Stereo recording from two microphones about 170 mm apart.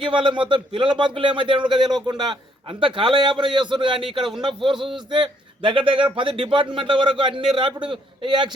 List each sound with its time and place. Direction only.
0.0 s a man's voice: 30° right (ahead or behind)